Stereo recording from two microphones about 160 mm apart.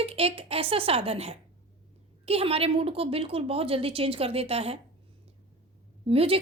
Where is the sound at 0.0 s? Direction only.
40° right (ahead or behind).